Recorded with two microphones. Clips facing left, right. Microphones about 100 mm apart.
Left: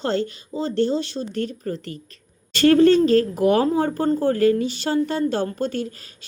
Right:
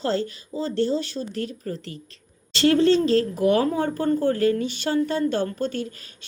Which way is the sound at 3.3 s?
40° left (ahead or behind).